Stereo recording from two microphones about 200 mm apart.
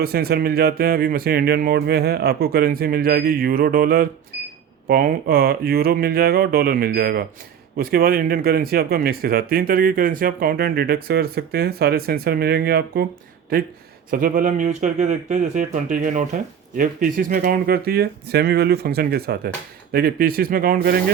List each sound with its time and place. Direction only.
0.0 s speech: 50° right (ahead or behind)
14.1 s speech: 45° right (ahead or behind)